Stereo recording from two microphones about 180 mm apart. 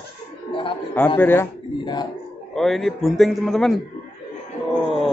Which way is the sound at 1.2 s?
10° left (ahead or behind).